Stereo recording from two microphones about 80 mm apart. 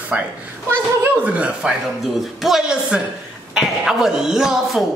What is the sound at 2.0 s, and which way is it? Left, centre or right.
Speech, centre.